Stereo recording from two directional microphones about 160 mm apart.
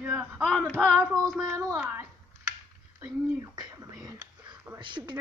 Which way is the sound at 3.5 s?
25° right (ahead or behind).